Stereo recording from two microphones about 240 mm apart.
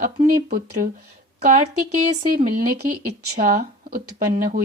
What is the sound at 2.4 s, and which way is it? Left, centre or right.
Speech, right.